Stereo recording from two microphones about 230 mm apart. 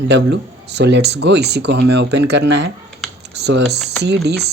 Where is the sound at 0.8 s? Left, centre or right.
Right.